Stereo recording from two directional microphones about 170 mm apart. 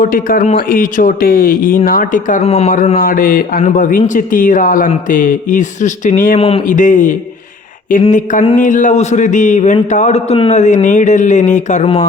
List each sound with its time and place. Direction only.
0.0 s a man's voice: 55° left (ahead or behind)